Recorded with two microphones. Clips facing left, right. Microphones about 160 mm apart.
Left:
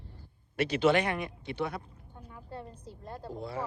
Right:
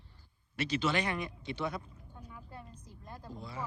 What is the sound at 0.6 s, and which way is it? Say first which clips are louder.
Speech: left 6 dB; 55° left (ahead or behind).